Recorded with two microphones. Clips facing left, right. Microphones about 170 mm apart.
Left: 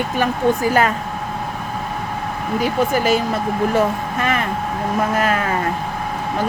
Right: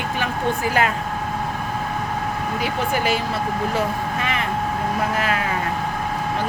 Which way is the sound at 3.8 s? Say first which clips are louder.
Left 4 dB; 45° left (ahead or behind).